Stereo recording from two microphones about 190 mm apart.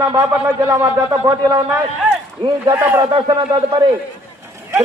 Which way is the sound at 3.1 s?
20° right (ahead or behind).